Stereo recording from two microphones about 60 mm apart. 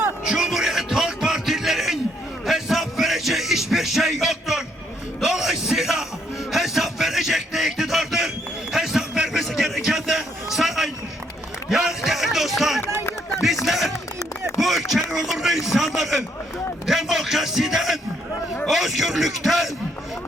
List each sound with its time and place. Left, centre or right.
0.3 s music: centre
5.2 s a sound: centre
11.7 s music: centre
13.7 s run: centre
14.6 s chop: centre
15.1 s a sound: centre